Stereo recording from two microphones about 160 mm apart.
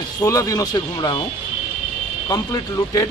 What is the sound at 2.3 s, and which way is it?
Speech, 25° left (ahead or behind).